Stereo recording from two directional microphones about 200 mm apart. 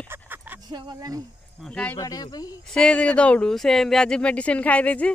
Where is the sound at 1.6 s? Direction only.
5° left (ahead or behind).